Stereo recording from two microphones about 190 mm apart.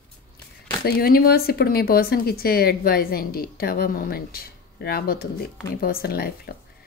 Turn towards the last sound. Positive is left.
turn(degrees=55)  # may be behind; listen again after turning